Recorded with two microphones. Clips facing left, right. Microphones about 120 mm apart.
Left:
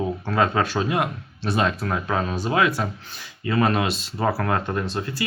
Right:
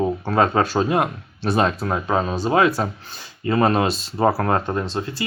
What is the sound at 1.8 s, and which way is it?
Speech, 25° right (ahead or behind).